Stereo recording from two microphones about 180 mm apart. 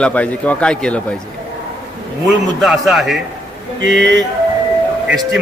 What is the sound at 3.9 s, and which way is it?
Music, 80° right.